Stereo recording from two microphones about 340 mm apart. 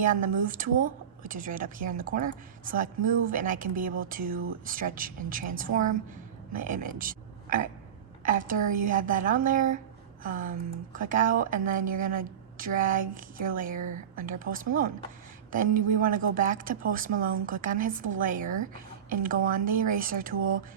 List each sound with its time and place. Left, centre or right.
0.0 s speech: right